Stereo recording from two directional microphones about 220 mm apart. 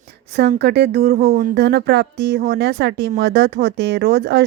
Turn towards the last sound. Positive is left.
turn(degrees=-50)  # may be behind; listen again after turning